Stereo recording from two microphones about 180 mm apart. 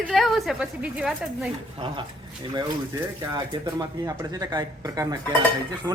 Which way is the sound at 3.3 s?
20° right (ahead or behind).